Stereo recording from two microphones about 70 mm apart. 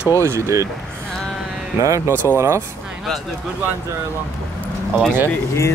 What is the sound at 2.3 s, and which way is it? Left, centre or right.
Speech, right.